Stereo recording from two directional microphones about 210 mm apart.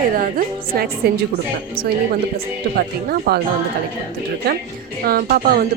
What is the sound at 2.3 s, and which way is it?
Speech, 45° right (ahead or behind).